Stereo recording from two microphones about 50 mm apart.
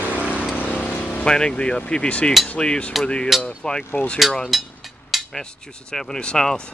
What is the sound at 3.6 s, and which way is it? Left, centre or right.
Speech, centre.